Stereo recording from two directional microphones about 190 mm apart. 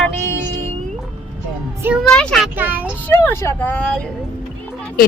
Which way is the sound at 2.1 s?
5° left (ahead or behind).